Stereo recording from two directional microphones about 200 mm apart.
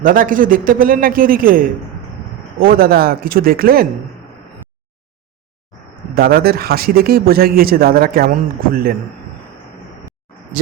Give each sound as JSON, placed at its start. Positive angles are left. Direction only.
{"t": 0.0, "sound": "speech", "side_deg": -45}
{"t": 6.1, "sound": "speech", "side_deg": -50}